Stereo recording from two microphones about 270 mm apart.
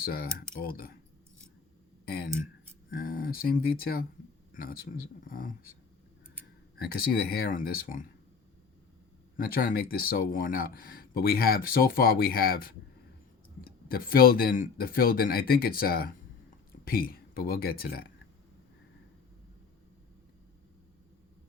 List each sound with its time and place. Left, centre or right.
0.0 s speech: left
2.0 s speech: left
6.7 s speech: left
9.3 s speech: left
13.8 s speech: left